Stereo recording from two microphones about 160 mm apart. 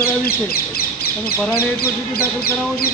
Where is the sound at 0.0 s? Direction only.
70° left (ahead or behind).